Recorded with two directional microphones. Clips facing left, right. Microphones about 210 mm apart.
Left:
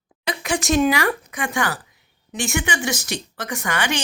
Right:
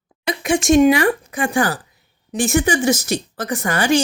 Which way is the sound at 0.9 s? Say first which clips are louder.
Right 5 dB; 30° right (ahead or behind).